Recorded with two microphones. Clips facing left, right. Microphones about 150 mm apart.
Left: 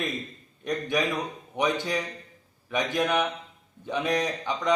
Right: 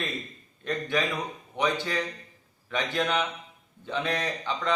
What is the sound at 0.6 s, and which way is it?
A man's voice, 15° left (ahead or behind).